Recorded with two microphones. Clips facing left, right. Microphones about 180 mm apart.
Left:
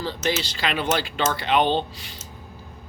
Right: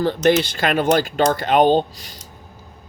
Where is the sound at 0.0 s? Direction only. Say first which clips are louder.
Right 10 dB; 55° right (ahead or behind).